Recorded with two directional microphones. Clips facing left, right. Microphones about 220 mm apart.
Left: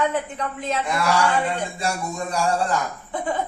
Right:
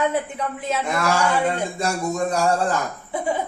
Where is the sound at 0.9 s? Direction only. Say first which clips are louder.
Even; 45° right (ahead or behind).